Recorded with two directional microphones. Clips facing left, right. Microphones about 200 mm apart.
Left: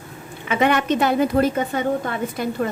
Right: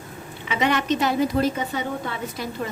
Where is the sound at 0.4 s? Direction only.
50° left (ahead or behind).